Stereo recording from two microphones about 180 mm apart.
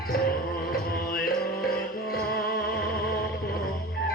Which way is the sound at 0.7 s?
55° left (ahead or behind).